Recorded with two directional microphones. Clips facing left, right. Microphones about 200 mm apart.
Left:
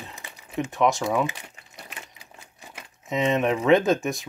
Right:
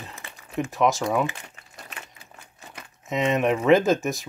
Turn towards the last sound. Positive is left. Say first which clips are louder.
# right 1 dB
turn(degrees=0)  # may be behind; listen again after turning